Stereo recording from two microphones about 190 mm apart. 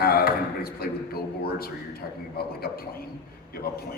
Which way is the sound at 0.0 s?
55° left (ahead or behind).